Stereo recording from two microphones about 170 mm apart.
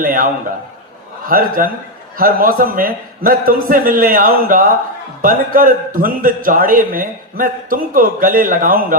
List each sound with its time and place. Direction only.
0.0 s a man's voice: 55° right (ahead or behind)
1.3 s a man's voice: 55° right (ahead or behind)